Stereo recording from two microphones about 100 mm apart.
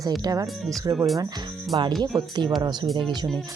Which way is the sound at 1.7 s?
50° right (ahead or behind).